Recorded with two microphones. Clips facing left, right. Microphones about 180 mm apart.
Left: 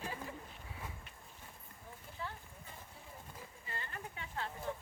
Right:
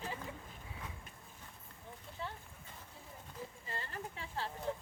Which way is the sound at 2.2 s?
30° right (ahead or behind).